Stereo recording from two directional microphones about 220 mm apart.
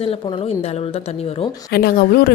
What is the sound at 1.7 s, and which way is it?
Speech, 45° left (ahead or behind).